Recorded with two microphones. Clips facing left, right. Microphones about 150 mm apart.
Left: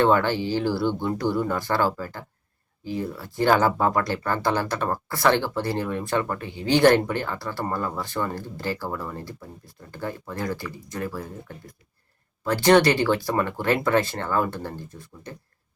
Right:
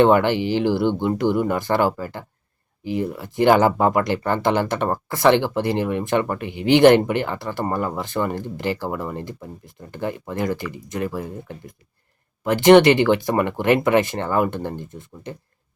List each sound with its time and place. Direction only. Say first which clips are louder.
0.0 s speech: right 5 dB; 20° right (ahead or behind)